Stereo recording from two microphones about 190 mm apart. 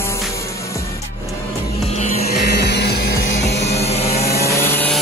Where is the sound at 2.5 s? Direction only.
60° left (ahead or behind).